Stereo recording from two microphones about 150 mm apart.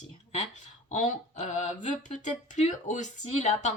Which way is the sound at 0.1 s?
50° left (ahead or behind).